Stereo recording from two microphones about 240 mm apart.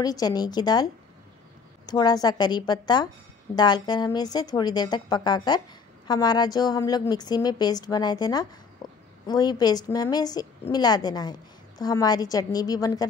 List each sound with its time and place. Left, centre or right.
0.0 s a woman's voice: centre
1.9 s a woman's voice: centre